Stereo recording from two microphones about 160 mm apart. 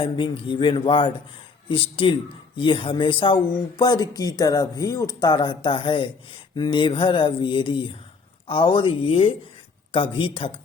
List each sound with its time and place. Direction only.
0.0 s mantra: 30° left (ahead or behind)
2.6 s speech: 30° left (ahead or behind)
6.6 s mantra: 30° left (ahead or behind)